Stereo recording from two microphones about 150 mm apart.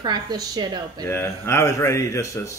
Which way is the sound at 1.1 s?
15° left (ahead or behind).